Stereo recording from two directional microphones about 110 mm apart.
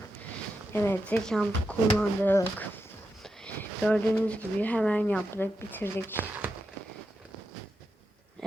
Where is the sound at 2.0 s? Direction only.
15° left (ahead or behind).